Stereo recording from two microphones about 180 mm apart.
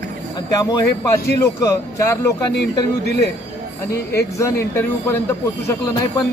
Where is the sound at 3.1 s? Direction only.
65° left (ahead or behind).